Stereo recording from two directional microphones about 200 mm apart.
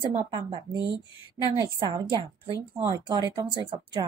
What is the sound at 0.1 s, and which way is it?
Speech, 25° right (ahead or behind).